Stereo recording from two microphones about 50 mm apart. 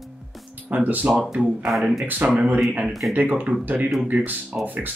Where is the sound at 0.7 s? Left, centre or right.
Right.